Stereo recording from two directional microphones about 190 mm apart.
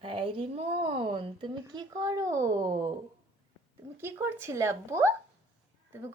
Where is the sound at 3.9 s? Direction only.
10° right (ahead or behind).